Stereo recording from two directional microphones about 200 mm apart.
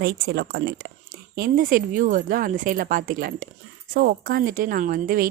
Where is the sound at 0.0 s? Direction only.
55° right (ahead or behind).